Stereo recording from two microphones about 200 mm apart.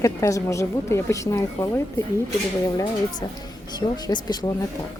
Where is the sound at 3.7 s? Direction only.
20° left (ahead or behind).